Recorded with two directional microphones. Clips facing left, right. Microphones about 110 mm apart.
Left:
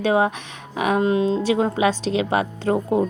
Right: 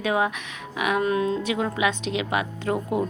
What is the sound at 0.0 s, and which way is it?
A woman's voice, 30° left (ahead or behind).